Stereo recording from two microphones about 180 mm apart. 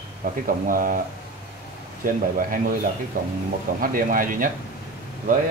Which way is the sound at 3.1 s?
50° right (ahead or behind).